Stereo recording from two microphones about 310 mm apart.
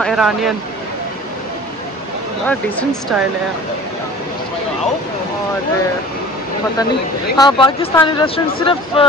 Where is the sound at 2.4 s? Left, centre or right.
Centre.